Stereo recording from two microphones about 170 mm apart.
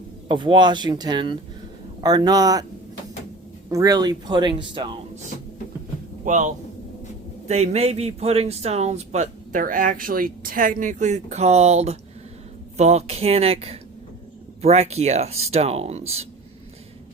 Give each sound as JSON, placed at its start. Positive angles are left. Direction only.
{"t": 0.3, "sound": "speech", "side_deg": -30}
{"t": 3.7, "sound": "speech", "side_deg": -20}
{"t": 6.2, "sound": "a man's voice", "side_deg": -45}